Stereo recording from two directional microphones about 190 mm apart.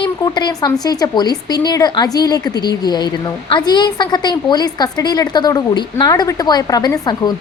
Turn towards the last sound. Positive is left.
turn(degrees=20)  # may be behind; listen again after turning